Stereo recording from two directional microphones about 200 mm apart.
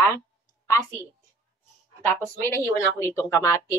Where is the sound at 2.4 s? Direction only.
15° left (ahead or behind).